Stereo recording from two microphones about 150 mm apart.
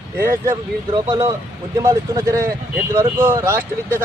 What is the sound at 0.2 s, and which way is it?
Speech, 15° right (ahead or behind).